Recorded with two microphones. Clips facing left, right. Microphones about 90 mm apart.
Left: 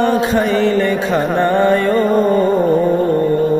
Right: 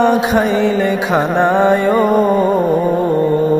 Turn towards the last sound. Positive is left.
turn(degrees=-20)  # may be behind; listen again after turning